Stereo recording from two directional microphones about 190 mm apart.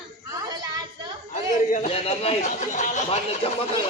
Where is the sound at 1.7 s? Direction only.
35° left (ahead or behind).